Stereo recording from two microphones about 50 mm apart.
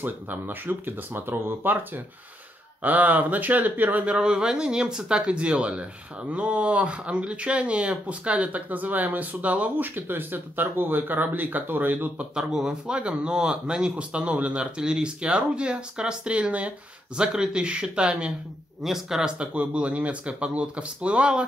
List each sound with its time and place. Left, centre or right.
0.0 s speech: right
4.1 s speech: centre
9.8 s speech: right
12.4 s speech: centre
17.2 s speech: centre
18.8 s speech: centre
19.3 s speech: right